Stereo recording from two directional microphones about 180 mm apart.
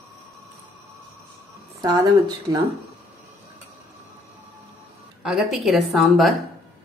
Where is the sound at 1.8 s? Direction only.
20° right (ahead or behind).